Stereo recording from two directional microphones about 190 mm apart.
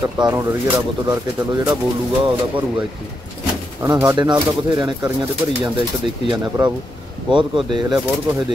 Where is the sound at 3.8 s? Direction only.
15° right (ahead or behind).